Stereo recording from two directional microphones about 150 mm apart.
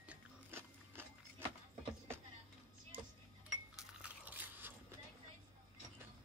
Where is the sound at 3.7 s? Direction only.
10° right (ahead or behind).